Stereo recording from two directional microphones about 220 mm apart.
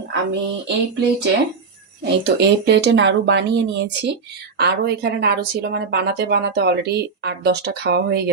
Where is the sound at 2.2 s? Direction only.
50° right (ahead or behind).